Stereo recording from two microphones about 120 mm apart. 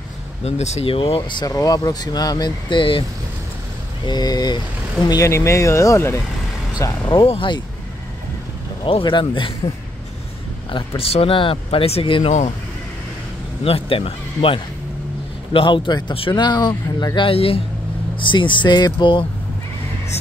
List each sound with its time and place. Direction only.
0.4 s speech: 65° left (ahead or behind); by 1.4 s 50° left (ahead or behind)
1.4 s speech: 30° left (ahead or behind)
4.0 s speech: 35° left (ahead or behind)
6.8 s speech: 40° left (ahead or behind)
8.8 s speech: 45° left (ahead or behind)
11.0 s speech: 55° left (ahead or behind)
12.3 s speech: 75° left (ahead or behind)
13.7 s speech: 50° left (ahead or behind)